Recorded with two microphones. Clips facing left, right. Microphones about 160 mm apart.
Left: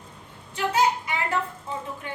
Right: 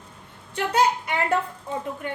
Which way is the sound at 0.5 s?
60° right (ahead or behind).